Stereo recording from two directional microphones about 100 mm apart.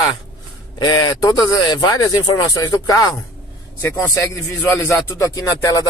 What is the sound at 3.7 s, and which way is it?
Speech, 25° left (ahead or behind).